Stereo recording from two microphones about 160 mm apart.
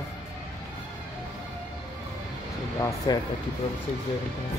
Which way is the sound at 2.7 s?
20° left (ahead or behind).